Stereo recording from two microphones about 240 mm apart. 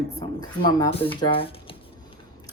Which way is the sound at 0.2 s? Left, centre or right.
Centre.